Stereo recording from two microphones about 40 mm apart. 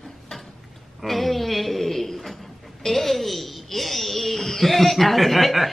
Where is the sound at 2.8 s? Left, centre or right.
Centre.